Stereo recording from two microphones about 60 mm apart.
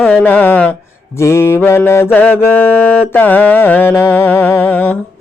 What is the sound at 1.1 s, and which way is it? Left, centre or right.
Mantra, left.